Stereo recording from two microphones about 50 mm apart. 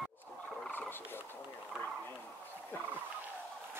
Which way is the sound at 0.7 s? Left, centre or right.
Left.